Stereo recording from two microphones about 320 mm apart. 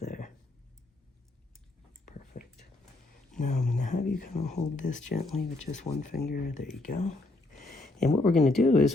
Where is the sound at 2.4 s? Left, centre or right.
Left.